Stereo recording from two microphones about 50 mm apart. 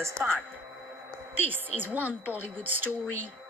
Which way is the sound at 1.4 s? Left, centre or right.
Right.